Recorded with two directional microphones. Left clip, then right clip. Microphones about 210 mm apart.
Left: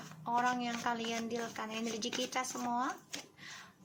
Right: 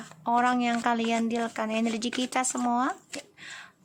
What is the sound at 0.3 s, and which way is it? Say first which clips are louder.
A woman's voice: right 9 dB; 45° right (ahead or behind).